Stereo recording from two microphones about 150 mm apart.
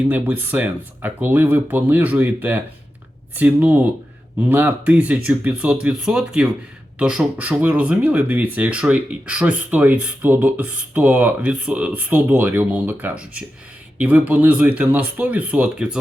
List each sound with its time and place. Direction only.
0.0 s speech: 10° right (ahead or behind)